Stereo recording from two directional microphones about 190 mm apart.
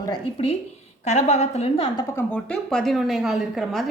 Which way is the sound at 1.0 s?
40° left (ahead or behind).